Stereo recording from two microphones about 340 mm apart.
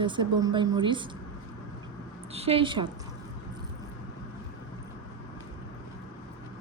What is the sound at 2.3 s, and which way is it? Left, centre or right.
Speech, centre.